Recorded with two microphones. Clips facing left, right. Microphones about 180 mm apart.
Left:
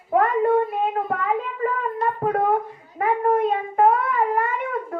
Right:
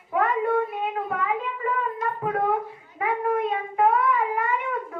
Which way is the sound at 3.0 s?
45° left (ahead or behind).